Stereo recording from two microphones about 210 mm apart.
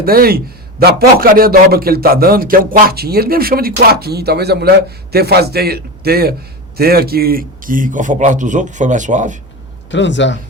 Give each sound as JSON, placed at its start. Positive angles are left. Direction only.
{"t": 0.0, "sound": "a man's voice", "side_deg": -45}
{"t": 9.9, "sound": "a man's voice", "side_deg": 60}